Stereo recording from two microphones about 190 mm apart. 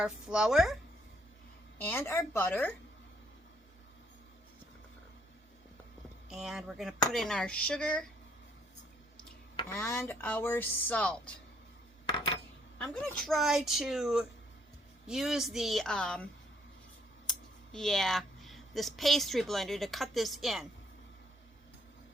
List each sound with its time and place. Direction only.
0.0 s speech: 5° right (ahead or behind)
1.8 s chopping: 10° left (ahead or behind)
6.3 s speech: 5° right (ahead or behind)
9.6 s chopping: 15° left (ahead or behind)
12.1 s a sound: 25° left (ahead or behind)
12.8 s speech: 5° left (ahead or behind)
17.2 s speech: centre (ahead or behind)